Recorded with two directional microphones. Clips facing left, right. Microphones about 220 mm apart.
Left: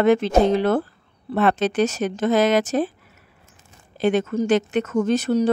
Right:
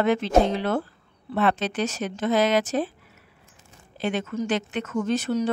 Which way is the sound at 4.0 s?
45° left (ahead or behind).